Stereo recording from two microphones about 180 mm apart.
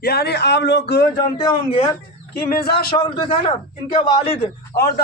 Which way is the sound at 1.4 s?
35° left (ahead or behind).